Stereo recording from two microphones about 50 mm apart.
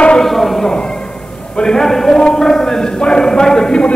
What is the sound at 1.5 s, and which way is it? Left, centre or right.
A man's voice, centre.